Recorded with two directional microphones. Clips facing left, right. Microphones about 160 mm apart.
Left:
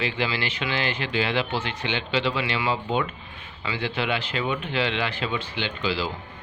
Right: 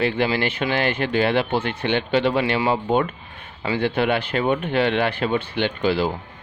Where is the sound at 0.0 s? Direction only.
50° right (ahead or behind).